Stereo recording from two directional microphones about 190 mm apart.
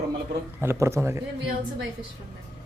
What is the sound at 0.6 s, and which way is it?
Speech, 15° right (ahead or behind).